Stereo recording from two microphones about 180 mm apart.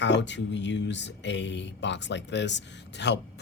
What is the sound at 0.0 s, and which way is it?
Speech, 80° left.